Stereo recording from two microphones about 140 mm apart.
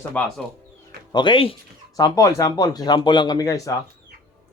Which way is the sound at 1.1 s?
35° left (ahead or behind).